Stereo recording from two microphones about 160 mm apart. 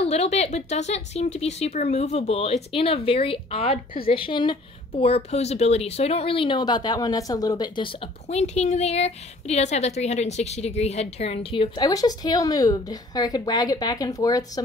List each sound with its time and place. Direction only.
0.0 s a woman's voice: 40° left (ahead or behind); by 14.6 s 20° left (ahead or behind)